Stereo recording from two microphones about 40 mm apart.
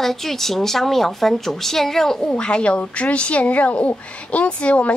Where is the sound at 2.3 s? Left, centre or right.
Left.